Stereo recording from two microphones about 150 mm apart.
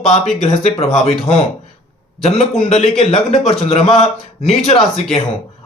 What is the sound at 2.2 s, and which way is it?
Speech, 45° left (ahead or behind).